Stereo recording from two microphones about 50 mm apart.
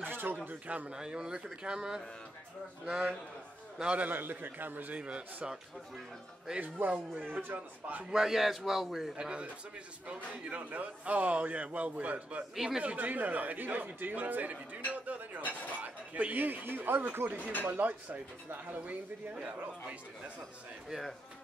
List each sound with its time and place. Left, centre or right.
0.0 s a sound: right
0.5 s a man's voice: right
0.9 s speech: centre
3.9 s a man's voice: right
6.6 s a man's voice: right
8.0 s speech: centre
9.1 s a man's voice: right
12.5 s speech: centre
12.8 s a man's voice: right